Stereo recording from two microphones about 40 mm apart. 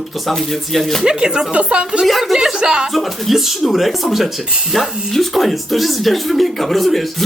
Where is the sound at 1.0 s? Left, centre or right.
Right.